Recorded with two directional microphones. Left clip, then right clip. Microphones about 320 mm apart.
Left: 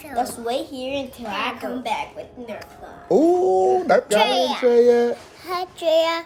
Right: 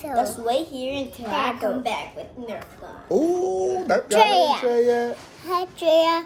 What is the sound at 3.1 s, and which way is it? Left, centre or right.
Speech, left.